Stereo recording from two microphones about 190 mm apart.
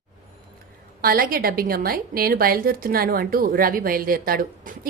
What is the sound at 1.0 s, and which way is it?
A woman's voice, 50° right (ahead or behind).